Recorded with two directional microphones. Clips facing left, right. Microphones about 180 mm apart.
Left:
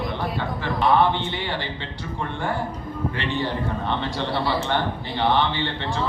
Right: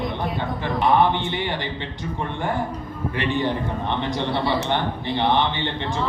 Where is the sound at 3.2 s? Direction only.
15° right (ahead or behind).